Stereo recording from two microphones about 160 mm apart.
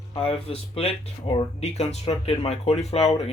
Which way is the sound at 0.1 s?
35° left (ahead or behind).